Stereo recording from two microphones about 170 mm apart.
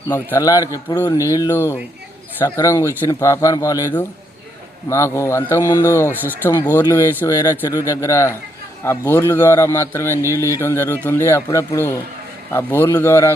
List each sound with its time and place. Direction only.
0.1 s a man's voice: 15° left (ahead or behind)